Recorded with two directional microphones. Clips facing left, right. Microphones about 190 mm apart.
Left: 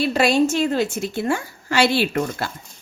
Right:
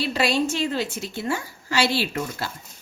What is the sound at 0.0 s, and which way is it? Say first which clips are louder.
A woman's voice: left 5 dB; 50° left (ahead or behind).